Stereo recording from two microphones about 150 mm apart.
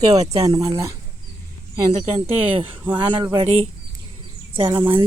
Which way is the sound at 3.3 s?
40° right (ahead or behind).